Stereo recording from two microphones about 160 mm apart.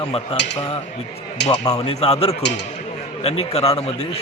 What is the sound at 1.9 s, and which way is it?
A man's voice, 40° left (ahead or behind).